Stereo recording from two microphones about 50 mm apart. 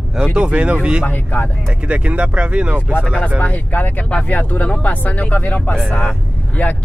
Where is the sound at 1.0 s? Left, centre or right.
Left.